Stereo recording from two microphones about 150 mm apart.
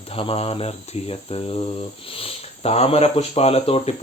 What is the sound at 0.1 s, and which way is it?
Speech, 40° left (ahead or behind).